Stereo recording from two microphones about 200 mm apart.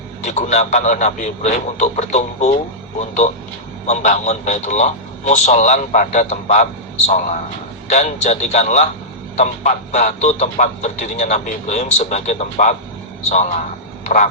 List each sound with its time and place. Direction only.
0.2 s speech: 35° left (ahead or behind)
7.9 s speech: 35° left (ahead or behind)